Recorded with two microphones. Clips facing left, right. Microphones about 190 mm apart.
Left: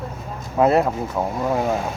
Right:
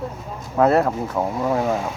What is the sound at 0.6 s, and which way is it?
Speech, 20° left (ahead or behind).